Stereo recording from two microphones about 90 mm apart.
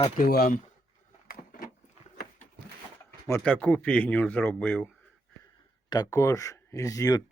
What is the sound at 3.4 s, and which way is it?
Speech, 15° left (ahead or behind).